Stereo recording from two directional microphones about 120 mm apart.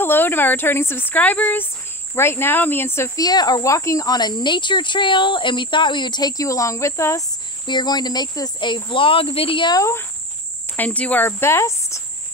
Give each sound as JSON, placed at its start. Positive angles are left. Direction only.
{"t": 0.0, "sound": "a woman's voice", "side_deg": 20}
{"t": 3.2, "sound": "speech", "side_deg": 35}
{"t": 7.6, "sound": "speech", "side_deg": 35}
{"t": 9.8, "sound": "speech", "side_deg": 25}
{"t": 10.8, "sound": "speech", "side_deg": 10}